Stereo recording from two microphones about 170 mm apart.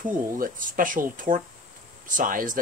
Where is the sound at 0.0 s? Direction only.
50° right (ahead or behind).